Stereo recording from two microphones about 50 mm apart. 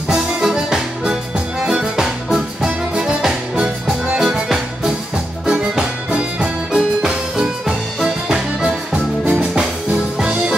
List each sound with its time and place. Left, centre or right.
0.1 s music: centre
2.9 s music: centre
4.2 s music: centre
8.9 s music: right